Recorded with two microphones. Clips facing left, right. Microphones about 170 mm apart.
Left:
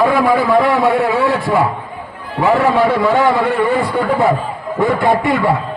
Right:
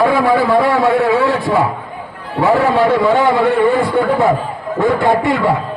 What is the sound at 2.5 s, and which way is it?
Speech, centre (ahead or behind).